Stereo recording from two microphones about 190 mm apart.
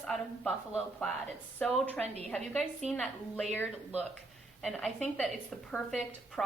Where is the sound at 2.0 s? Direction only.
35° right (ahead or behind).